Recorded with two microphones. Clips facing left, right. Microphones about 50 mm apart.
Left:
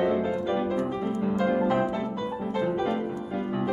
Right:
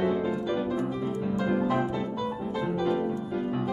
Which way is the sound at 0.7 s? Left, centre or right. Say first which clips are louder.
Left 2 dB; left.